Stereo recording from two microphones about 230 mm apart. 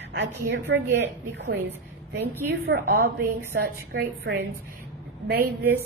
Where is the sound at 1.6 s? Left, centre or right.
Right.